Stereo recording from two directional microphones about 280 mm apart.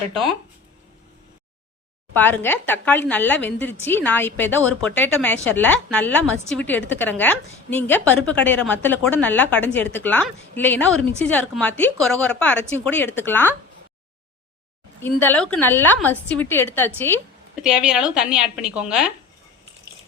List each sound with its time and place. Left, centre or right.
0.1 s a woman's voice: centre
2.1 s a woman's voice: centre
15.0 s a woman's voice: centre